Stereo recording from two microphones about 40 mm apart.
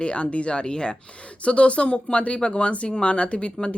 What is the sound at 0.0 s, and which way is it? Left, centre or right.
Speech, left.